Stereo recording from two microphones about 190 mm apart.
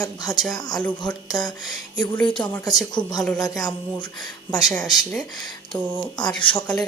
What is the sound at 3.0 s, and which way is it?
Speech, 5° left (ahead or behind).